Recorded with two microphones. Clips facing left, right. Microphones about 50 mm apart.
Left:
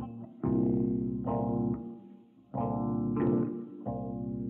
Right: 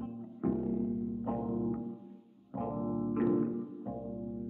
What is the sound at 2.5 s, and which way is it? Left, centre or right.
Music, left.